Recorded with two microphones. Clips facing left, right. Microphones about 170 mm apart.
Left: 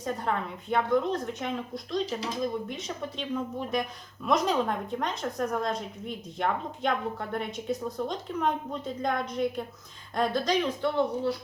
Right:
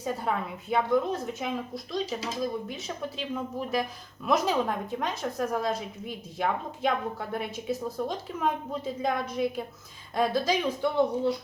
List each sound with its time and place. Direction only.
0.0 s a woman's voice: 5° right (ahead or behind)